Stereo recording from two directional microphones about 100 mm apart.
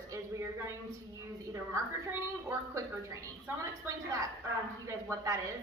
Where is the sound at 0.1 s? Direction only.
30° right (ahead or behind).